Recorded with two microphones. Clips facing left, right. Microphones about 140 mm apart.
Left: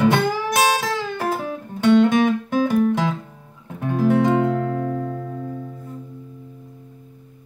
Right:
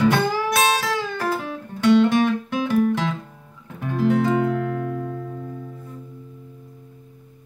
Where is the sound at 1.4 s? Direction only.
45° left (ahead or behind).